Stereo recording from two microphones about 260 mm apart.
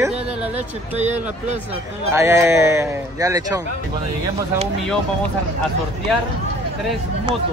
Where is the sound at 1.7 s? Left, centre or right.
Centre.